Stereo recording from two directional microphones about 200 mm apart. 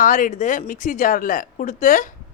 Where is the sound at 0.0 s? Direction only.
40° left (ahead or behind).